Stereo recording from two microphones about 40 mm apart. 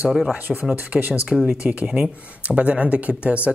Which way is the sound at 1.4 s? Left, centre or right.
Right.